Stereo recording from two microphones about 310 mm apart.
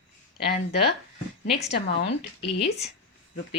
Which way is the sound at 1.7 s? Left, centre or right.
Left.